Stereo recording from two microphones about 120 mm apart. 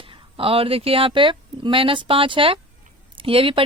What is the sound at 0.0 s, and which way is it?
Speech, 50° right (ahead or behind).